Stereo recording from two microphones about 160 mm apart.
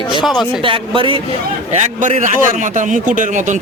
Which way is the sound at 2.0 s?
50° right (ahead or behind).